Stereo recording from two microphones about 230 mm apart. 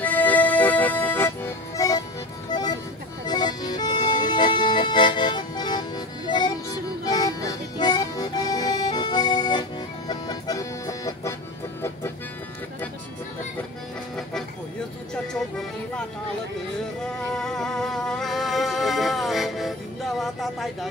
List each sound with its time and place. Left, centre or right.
0.0 s accordion: centre
2.5 s music: centre
15.3 s music: centre